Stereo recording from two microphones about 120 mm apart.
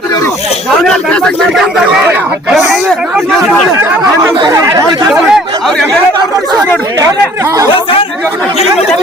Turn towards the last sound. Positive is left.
turn(degrees=-30)  # may be behind; listen again after turning